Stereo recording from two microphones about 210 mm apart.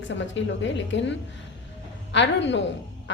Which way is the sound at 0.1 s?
60° left (ahead or behind).